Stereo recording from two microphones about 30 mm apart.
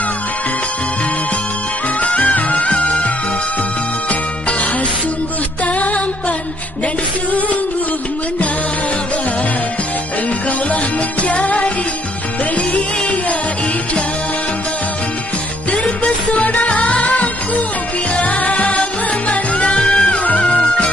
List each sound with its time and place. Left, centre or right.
2.0 s music: left
4.1 s music: left
5.7 s music: left
10.7 s music: left
15.7 s music: left
19.7 s music: left